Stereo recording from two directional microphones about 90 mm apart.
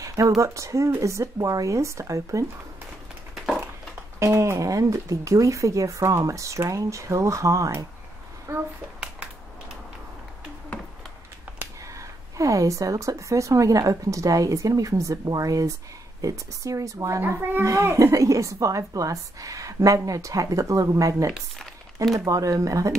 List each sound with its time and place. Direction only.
0.0 s a sound: 35° right (ahead or behind)
0.4 s speech: 35° right (ahead or behind)
4.2 s a child's voice: 30° right (ahead or behind)
12.4 s speech: 35° right (ahead or behind)